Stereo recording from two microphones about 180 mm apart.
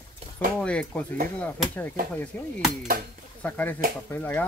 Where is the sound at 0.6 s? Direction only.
5° left (ahead or behind).